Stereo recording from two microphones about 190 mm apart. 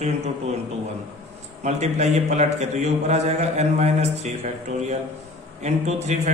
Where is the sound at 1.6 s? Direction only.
35° right (ahead or behind).